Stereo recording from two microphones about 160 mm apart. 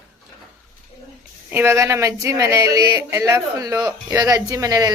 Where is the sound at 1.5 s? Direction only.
15° right (ahead or behind).